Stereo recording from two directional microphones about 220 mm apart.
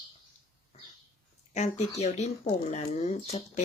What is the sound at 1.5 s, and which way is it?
Speech, 30° left (ahead or behind).